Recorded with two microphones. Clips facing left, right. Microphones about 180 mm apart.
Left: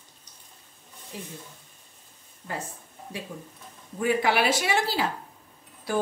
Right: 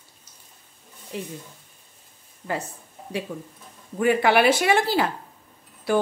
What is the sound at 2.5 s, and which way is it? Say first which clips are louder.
Speech: right 6 dB; 75° right (ahead or behind).